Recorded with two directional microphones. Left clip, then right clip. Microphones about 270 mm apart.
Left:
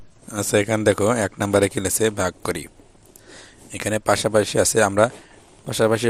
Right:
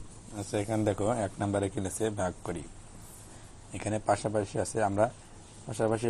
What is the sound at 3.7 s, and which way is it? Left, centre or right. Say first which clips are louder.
Speech: left 9 dB; left.